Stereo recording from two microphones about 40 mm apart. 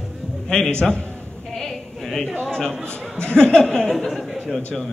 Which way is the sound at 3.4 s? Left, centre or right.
Centre.